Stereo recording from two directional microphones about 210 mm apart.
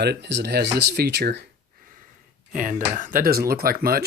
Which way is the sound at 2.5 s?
40° right (ahead or behind).